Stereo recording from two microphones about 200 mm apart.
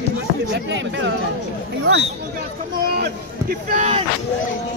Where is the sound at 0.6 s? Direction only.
60° right (ahead or behind).